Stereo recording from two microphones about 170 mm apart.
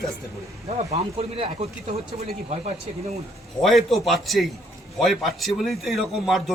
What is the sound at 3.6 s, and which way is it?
A man's voice, centre (ahead or behind).